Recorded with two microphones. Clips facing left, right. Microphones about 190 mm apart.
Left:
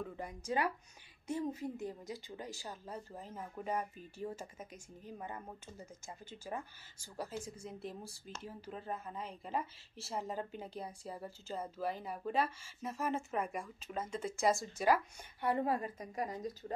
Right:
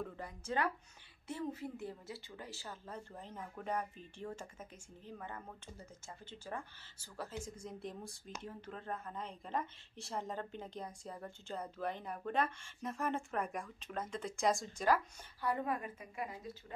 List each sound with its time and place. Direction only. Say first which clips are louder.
0.5 s speech: left 1 dB; 10° left (ahead or behind)
7.6 s speech: even; 5° left (ahead or behind)
15.4 s a woman's voice: left 3 dB; 30° left (ahead or behind)